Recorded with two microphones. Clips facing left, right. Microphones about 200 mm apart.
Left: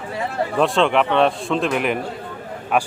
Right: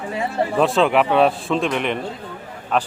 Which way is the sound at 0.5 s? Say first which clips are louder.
Even; centre (ahead or behind).